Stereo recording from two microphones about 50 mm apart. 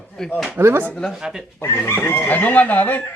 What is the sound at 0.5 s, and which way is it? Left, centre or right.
Speech, right.